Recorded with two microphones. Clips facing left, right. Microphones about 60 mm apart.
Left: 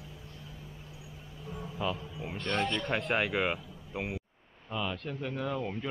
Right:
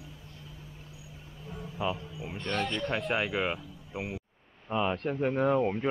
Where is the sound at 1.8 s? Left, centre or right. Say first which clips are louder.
Right 2 dB; centre.